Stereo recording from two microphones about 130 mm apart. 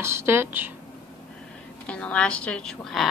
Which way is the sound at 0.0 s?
20° right (ahead or behind).